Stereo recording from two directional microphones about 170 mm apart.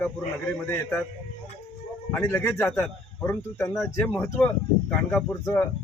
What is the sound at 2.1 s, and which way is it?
A man's voice, 10° left (ahead or behind).